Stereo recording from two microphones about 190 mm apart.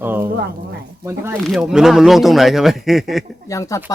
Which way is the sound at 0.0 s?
10° right (ahead or behind).